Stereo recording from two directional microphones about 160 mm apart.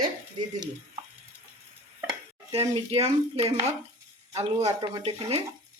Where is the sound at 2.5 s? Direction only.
40° right (ahead or behind).